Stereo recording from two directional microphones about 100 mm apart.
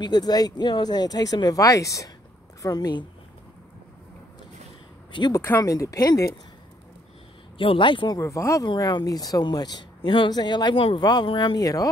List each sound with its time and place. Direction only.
0.0 s speech: 45° left (ahead or behind)
5.6 s speech: 35° left (ahead or behind)
7.5 s speech: 60° left (ahead or behind)
8.2 s speech: 30° left (ahead or behind)
8.6 s speech: 45° left (ahead or behind)
11.0 s speech: 45° left (ahead or behind)